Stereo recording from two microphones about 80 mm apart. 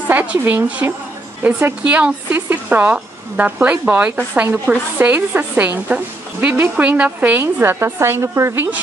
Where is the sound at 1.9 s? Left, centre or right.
Centre; by 8.6 s right.